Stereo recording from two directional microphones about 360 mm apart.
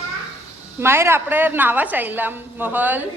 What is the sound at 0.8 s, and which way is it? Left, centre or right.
A woman's voice, centre.